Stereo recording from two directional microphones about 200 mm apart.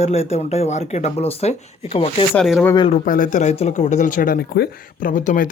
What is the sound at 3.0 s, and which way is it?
Speech, 40° left (ahead or behind).